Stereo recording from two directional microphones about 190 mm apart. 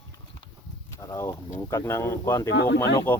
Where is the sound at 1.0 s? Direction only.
15° left (ahead or behind).